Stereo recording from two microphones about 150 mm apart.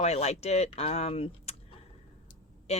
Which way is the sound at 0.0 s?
45° left (ahead or behind).